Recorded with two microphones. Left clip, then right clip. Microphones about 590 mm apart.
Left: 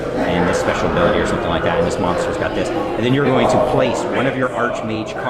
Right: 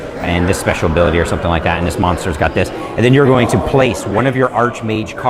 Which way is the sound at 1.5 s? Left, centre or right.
Right.